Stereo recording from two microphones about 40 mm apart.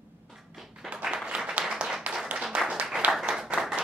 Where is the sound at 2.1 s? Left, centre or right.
Right.